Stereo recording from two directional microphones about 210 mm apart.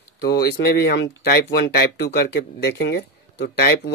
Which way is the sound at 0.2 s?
50° left (ahead or behind).